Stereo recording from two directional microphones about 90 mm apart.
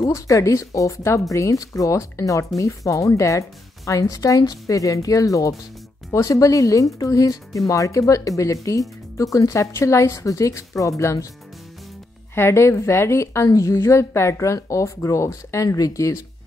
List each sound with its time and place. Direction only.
0.0 s a woman's voice: 35° left (ahead or behind)
12.4 s a woman's voice: 30° left (ahead or behind)